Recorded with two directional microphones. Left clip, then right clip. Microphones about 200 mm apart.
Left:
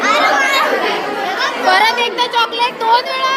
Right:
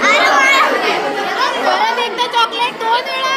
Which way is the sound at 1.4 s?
25° left (ahead or behind).